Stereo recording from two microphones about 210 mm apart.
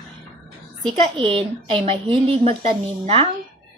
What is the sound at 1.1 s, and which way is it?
A woman's voice, 25° right (ahead or behind).